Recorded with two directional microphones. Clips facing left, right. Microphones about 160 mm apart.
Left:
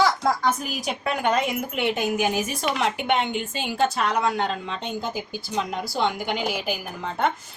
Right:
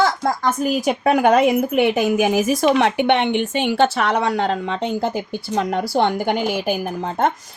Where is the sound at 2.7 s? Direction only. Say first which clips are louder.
Right 6 dB; 65° right (ahead or behind).